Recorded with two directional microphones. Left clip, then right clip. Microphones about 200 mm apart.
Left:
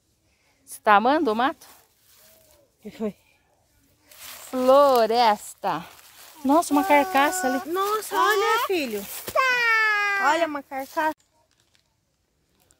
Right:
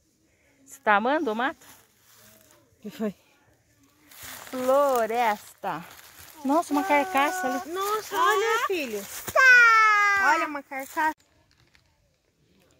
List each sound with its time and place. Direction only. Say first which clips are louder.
0.7 s speech: left 4 dB; 15° left (ahead or behind)
1.6 s a sound: left 1 dB; centre (ahead or behind)
2.8 s speech: left 1 dB; 50° right (ahead or behind)
4.6 s speech: left 5 dB; 25° left (ahead or behind)
7.3 s speech: left 3 dB; 25° left (ahead or behind)
7.6 s speech: left 4 dB; 60° left (ahead or behind)
8.1 s speech: left 1 dB; 50° left (ahead or behind)
8.7 s speech: left 3 dB; 65° left (ahead or behind)
9.2 s wail: right 6 dB; 20° left (ahead or behind)
10.3 s speech: left 2 dB; 45° left (ahead or behind)